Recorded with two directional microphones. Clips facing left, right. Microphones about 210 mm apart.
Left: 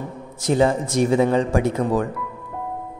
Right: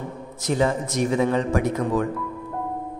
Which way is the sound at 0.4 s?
30° left (ahead or behind).